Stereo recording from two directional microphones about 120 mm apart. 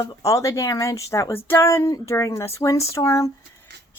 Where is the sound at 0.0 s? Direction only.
30° left (ahead or behind).